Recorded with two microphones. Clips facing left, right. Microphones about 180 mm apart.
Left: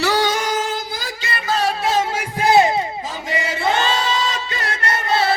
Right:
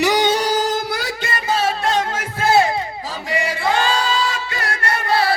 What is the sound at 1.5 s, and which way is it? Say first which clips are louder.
Music: left 1 dB; centre (ahead or behind).